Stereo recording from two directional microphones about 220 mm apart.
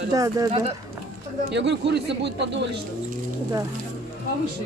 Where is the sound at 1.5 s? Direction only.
50° right (ahead or behind).